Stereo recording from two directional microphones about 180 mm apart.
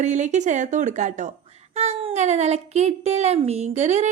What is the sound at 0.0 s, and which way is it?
A woman's voice, 40° right (ahead or behind).